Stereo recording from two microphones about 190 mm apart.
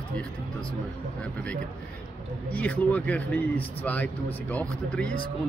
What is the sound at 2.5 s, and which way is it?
Speech, 10° left (ahead or behind).